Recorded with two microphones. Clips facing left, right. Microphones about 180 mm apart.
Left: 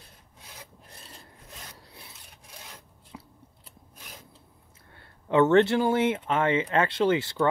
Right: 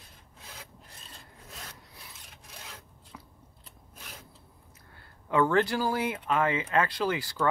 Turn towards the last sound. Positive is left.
turn(degrees=25)  # may be behind; listen again after turning